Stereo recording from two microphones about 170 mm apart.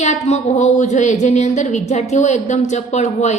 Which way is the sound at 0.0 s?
40° left (ahead or behind).